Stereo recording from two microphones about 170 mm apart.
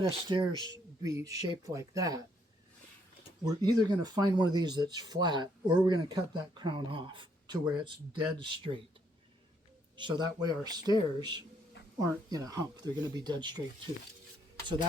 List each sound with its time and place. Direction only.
0.0 s speech: 30° right (ahead or behind)
3.4 s speech: 25° right (ahead or behind)
10.0 s speech: 25° right (ahead or behind)